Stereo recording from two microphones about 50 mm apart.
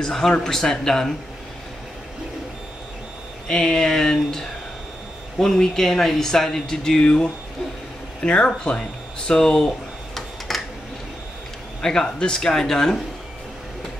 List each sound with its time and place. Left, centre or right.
0.0 s speech: centre
3.4 s speech: centre
10.5 s a sound: centre
11.8 s speech: centre